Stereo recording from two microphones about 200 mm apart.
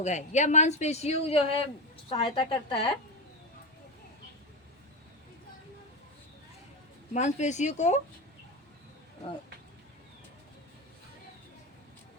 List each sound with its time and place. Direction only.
0.0 s a woman's voice: 35° left (ahead or behind)
7.1 s speech: 35° left (ahead or behind)